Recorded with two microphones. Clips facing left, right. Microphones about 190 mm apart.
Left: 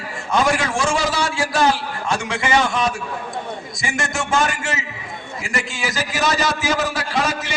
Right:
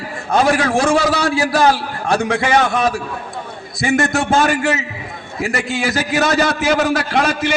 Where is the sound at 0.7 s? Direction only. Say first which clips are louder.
Right 6 dB; 60° right (ahead or behind).